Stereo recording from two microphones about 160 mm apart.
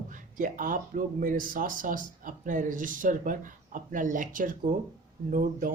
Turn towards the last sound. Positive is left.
turn(degrees=-60)  # may be behind; listen again after turning